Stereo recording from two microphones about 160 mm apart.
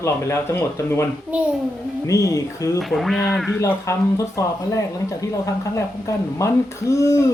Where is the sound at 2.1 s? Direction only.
20° left (ahead or behind).